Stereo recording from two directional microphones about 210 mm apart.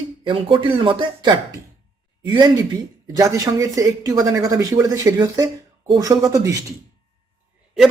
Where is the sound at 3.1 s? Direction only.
15° right (ahead or behind).